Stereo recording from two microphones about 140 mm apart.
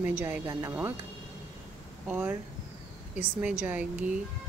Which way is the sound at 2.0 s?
10° right (ahead or behind).